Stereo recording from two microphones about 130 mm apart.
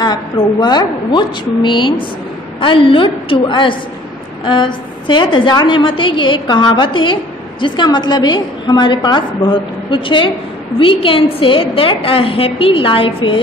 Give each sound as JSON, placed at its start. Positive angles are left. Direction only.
{"t": 0.0, "sound": "a woman's voice", "side_deg": 30}